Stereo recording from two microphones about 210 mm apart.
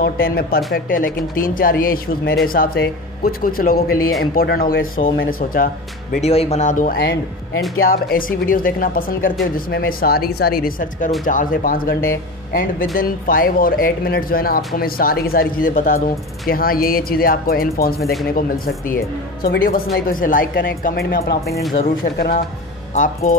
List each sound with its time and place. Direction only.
0.0 s speech: 45° left (ahead or behind)
6.2 s speech: 30° left (ahead or behind)